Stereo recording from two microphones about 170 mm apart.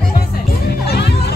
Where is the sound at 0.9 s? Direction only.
75° left (ahead or behind).